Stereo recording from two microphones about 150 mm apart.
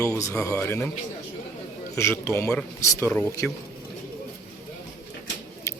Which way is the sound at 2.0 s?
15° left (ahead or behind).